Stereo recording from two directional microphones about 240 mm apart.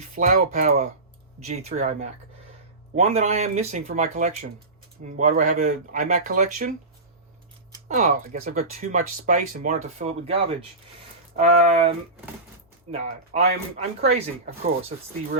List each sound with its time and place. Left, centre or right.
0.1 s speech: right
7.9 s speech: right
11.3 s speech: right